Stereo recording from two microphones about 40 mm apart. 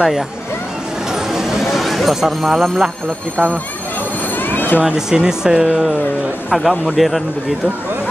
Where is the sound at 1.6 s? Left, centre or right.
Centre.